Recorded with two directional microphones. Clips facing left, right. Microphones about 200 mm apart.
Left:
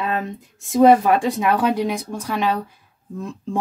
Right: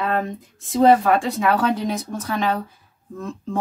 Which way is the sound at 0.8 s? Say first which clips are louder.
Left 2 dB; 15° left (ahead or behind).